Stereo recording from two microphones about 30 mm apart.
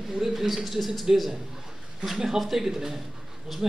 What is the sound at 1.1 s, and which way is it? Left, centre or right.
Speech, right.